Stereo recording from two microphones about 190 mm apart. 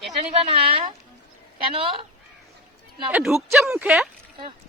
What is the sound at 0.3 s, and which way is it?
Speech, 30° right (ahead or behind).